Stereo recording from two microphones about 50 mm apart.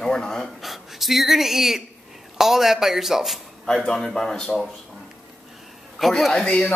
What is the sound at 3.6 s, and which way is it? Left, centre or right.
Speech, centre.